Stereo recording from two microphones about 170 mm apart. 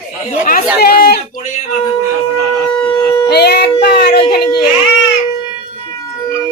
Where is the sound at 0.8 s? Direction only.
65° left (ahead or behind).